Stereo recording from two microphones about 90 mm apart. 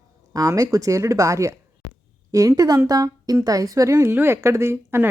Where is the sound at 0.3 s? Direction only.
40° right (ahead or behind).